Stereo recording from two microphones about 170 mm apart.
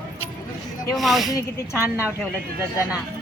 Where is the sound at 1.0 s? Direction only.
Centre (ahead or behind).